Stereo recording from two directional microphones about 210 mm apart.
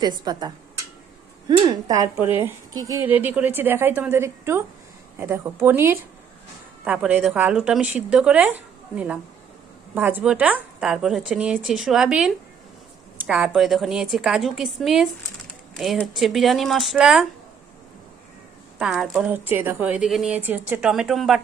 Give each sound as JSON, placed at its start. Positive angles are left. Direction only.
{"t": 0.0, "sound": "speech", "side_deg": -20}
{"t": 18.8, "sound": "speech", "side_deg": -5}